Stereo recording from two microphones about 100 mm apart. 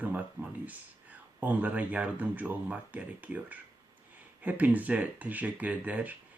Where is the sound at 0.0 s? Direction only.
15° right (ahead or behind).